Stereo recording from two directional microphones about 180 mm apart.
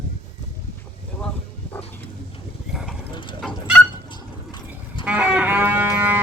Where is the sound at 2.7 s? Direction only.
Centre (ahead or behind).